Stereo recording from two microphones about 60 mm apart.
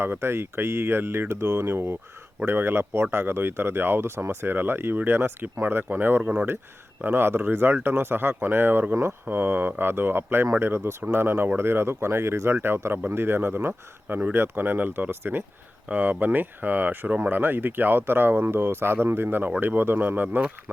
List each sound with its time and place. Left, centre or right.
0.0 s speech: right
9.2 s speech: right
15.9 s speech: right